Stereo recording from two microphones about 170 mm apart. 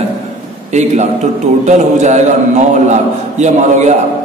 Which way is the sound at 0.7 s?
45° right (ahead or behind).